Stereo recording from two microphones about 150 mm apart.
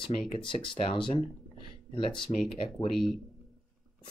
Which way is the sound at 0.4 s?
35° left (ahead or behind).